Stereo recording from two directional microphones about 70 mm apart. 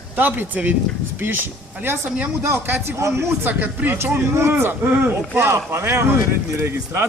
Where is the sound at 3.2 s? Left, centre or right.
Right.